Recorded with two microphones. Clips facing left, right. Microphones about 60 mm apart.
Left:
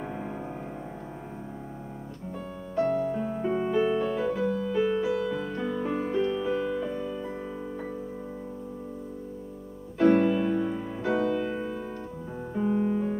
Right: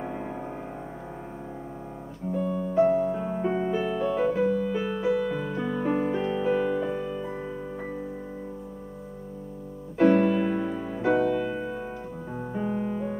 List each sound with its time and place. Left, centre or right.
2.4 s music: centre
3.7 s music: centre
4.1 s music: right
6.9 s music: centre
9.9 s music: centre